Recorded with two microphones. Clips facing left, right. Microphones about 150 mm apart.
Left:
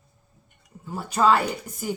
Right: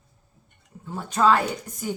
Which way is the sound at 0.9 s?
10° left (ahead or behind).